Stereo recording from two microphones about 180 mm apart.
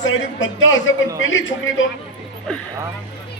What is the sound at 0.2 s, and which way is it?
A man's voice, 90° left.